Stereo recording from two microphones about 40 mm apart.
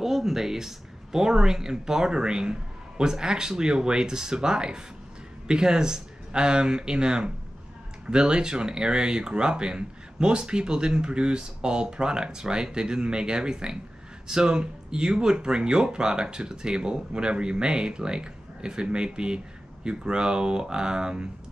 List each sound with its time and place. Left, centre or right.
0.0 s speech: centre